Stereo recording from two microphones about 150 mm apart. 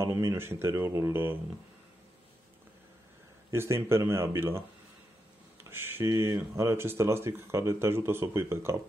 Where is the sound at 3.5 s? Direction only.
20° right (ahead or behind).